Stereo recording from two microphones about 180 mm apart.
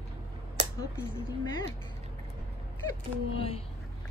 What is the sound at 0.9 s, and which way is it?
Speech, 20° left (ahead or behind).